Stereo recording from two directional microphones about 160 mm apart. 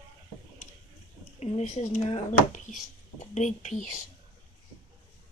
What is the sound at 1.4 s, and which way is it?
Speech, 45° left (ahead or behind).